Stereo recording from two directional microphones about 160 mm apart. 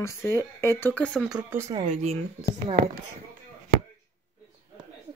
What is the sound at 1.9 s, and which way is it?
Speech, 45° right (ahead or behind).